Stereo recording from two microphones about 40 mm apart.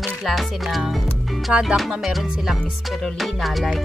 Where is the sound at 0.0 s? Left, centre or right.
Centre.